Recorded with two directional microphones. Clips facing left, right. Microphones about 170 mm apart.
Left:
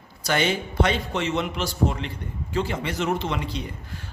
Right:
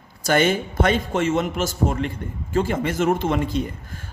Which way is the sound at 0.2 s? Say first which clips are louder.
Right 5 dB; 50° right (ahead or behind).